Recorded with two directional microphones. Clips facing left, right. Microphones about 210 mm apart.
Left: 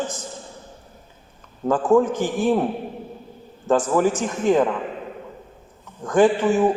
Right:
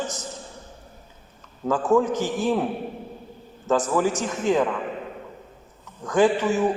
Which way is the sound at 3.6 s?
50° left (ahead or behind).